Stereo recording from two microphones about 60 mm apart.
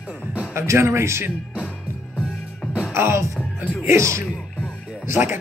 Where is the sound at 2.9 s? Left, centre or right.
Right.